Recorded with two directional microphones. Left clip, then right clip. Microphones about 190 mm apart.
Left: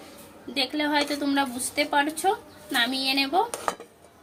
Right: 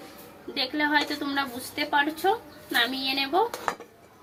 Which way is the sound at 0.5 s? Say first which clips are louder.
Even; 40° left (ahead or behind).